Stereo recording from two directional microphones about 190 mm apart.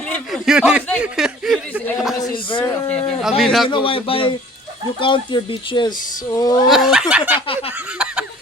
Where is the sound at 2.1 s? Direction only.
25° left (ahead or behind).